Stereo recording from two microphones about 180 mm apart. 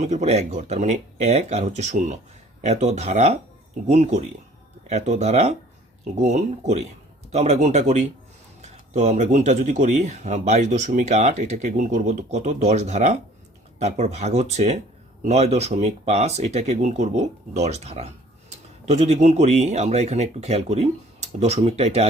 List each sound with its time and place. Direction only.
0.0 s speech: 40° right (ahead or behind)